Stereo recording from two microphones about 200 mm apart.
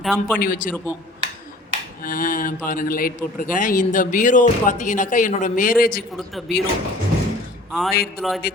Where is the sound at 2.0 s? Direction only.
45° left (ahead or behind).